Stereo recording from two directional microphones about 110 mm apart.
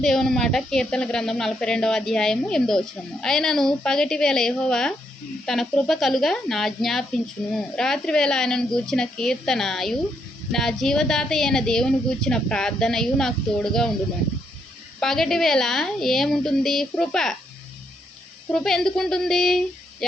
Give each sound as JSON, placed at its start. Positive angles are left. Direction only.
{"t": 0.0, "sound": "speech", "side_deg": 5}
{"t": 15.0, "sound": "speech", "side_deg": 5}
{"t": 18.5, "sound": "speech", "side_deg": 5}